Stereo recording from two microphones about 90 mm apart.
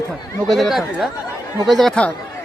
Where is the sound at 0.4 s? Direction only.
Centre (ahead or behind).